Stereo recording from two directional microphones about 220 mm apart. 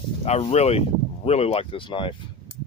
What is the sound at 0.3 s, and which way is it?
Speech, 30° left (ahead or behind).